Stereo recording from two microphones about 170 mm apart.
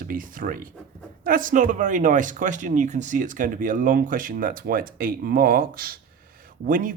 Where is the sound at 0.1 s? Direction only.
55° right (ahead or behind).